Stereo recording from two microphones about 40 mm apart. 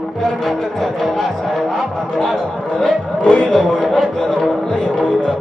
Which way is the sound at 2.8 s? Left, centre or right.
Left.